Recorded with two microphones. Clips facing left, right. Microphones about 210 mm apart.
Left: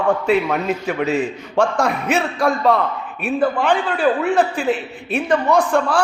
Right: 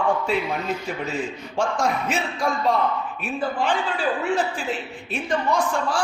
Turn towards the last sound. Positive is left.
turn(degrees=60)  # may be behind; listen again after turning